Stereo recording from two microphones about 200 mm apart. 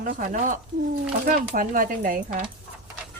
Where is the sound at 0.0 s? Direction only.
40° right (ahead or behind).